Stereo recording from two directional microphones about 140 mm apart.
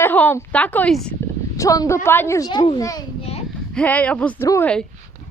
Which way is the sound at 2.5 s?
30° left (ahead or behind).